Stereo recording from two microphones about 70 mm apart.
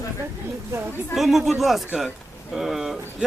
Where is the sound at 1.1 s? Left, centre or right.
Centre.